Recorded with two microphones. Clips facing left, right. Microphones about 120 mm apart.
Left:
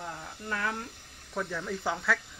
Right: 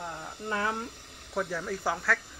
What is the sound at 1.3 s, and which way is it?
Speech, 5° right (ahead or behind).